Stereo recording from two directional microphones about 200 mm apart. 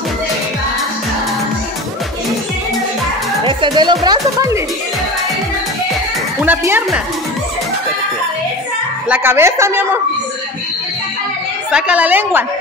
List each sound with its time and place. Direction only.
3.4 s speech: 25° right (ahead or behind)
6.4 s a woman's voice: 10° right (ahead or behind)
9.1 s a woman's voice: 10° right (ahead or behind)
11.7 s a woman's voice: 5° right (ahead or behind)